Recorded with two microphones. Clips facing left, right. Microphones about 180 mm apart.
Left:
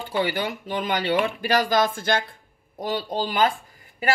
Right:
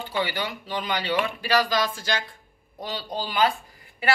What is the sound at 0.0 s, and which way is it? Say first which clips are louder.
A woman's voice: left 3 dB; 50° left (ahead or behind).